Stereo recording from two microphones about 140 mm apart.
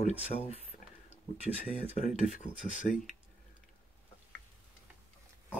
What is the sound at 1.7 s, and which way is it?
Speech, 55° left (ahead or behind).